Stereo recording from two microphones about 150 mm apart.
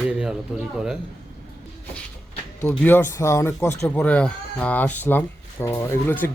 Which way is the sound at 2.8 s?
15° left (ahead or behind).